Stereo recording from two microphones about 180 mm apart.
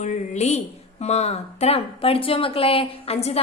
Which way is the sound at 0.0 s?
40° left (ahead or behind).